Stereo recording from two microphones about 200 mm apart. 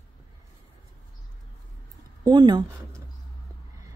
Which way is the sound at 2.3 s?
20° right (ahead or behind).